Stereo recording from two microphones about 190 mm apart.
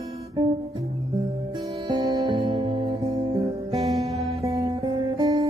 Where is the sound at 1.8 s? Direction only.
20° right (ahead or behind).